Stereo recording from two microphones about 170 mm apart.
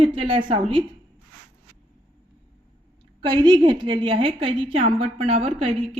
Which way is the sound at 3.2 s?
25° right (ahead or behind).